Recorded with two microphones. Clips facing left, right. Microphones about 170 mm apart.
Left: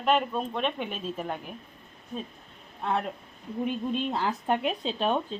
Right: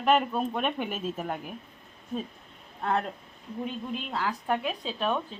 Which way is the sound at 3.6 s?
25° left (ahead or behind).